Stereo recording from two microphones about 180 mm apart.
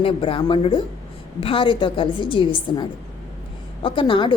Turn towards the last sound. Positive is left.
turn(degrees=25)  # may be behind; listen again after turning